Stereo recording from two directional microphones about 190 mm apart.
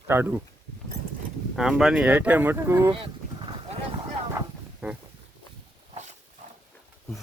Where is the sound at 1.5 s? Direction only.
Centre (ahead or behind).